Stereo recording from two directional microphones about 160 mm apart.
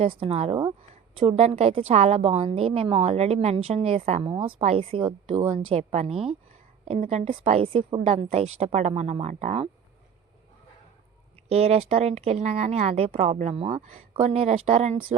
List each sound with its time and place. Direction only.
0.2 s speech: 40° right (ahead or behind)
4.3 s speech: 30° right (ahead or behind)
11.4 s speech: 40° right (ahead or behind)